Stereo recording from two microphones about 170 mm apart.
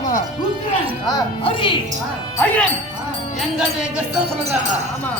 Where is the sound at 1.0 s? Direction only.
30° left (ahead or behind).